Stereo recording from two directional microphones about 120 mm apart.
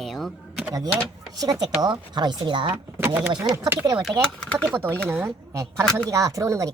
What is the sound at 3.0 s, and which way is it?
Speech, 15° right (ahead or behind).